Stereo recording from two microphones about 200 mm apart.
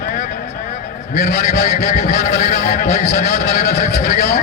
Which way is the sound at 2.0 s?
40° left (ahead or behind).